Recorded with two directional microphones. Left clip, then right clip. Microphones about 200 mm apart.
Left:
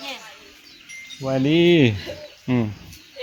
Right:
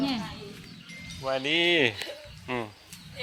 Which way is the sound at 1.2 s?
20° right (ahead or behind).